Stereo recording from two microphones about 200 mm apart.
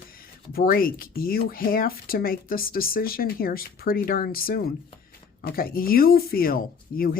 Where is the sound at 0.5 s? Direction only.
45° left (ahead or behind).